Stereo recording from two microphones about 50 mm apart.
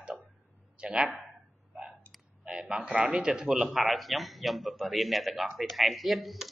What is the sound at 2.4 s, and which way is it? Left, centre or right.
A man's voice, centre.